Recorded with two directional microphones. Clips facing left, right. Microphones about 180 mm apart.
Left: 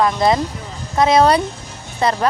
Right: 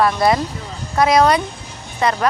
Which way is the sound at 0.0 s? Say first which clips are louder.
Even; 20° left (ahead or behind).